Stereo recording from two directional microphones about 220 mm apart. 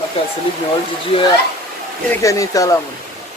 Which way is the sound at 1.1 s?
25° left (ahead or behind).